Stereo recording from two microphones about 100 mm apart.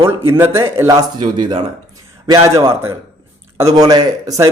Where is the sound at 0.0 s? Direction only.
25° right (ahead or behind).